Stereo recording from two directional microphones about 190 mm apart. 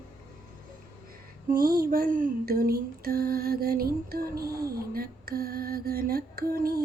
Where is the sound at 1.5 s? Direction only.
50° right (ahead or behind).